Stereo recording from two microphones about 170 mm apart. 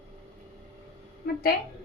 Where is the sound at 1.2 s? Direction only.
65° left (ahead or behind).